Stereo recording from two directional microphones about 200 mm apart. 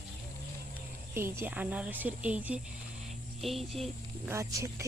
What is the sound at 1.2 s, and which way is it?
Speech, 10° right (ahead or behind).